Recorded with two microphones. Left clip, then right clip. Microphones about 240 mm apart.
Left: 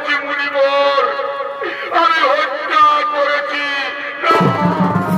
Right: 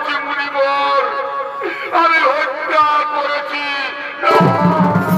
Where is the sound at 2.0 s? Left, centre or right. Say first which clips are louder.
Even; left.